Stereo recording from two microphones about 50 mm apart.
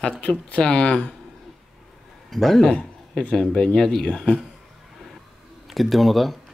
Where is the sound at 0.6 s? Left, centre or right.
Centre.